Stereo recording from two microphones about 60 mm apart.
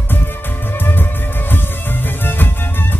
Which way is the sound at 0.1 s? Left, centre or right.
Left.